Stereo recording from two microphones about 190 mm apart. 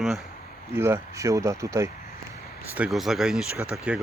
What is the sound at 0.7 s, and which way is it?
Speech, 15° right (ahead or behind).